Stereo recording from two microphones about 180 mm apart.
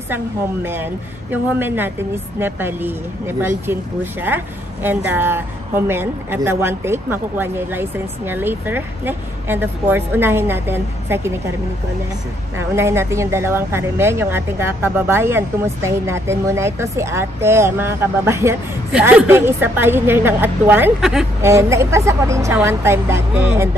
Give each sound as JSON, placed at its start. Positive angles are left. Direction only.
{"t": 0.7, "sound": "speech", "side_deg": -10}
{"t": 12.5, "sound": "speech", "side_deg": -15}
{"t": 21.4, "sound": "speech", "side_deg": -15}